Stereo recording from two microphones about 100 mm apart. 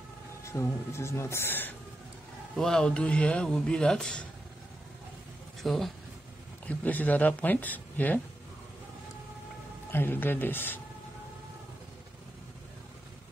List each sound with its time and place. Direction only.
0.4 s speech: 30° left (ahead or behind)
2.5 s speech: 5° left (ahead or behind)
5.6 s speech: 5° left (ahead or behind)
6.7 s speech: 15° left (ahead or behind)
9.8 s speech: 20° left (ahead or behind)